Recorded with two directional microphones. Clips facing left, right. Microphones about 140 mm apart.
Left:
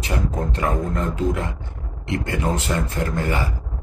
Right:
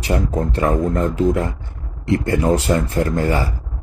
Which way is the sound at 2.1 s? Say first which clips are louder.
Right 7 dB; 35° right (ahead or behind).